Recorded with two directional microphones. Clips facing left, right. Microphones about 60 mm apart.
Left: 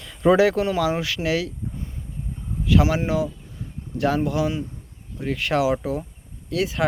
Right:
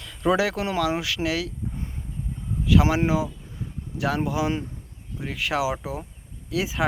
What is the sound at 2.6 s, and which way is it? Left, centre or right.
Speech, centre.